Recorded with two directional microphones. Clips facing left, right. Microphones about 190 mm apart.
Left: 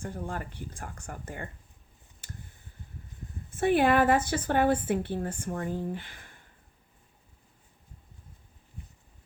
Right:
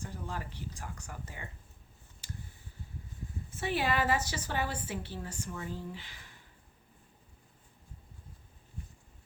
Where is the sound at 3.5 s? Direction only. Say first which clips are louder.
Left 9 dB; 55° left (ahead or behind).